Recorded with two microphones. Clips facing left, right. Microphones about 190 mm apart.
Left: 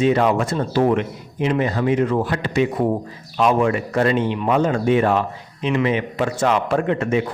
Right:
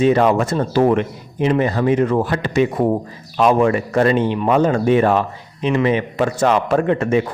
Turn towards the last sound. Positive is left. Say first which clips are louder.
# right 3 dB
turn(degrees=-45)  # may be behind; listen again after turning